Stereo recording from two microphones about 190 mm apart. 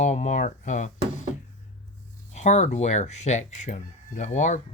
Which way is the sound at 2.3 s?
35° left (ahead or behind).